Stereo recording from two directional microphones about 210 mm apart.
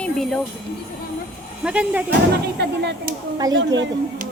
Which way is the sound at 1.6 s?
5° right (ahead or behind).